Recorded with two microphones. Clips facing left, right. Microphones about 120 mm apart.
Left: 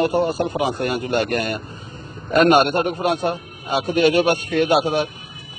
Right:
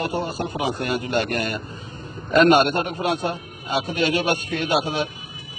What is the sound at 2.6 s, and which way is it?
Speech, 55° left (ahead or behind).